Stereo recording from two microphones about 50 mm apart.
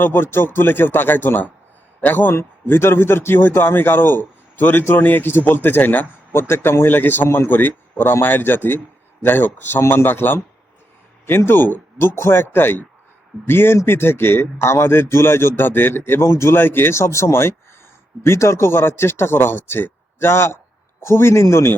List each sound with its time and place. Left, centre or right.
0.0 s a man's voice: left
2.6 s a man's voice: left
6.5 s a man's voice: left
16.6 s a man's voice: left